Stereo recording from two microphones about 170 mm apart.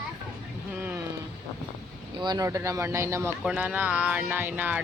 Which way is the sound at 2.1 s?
25° right (ahead or behind).